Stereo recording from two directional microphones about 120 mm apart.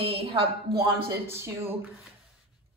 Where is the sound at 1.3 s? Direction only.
20° right (ahead or behind).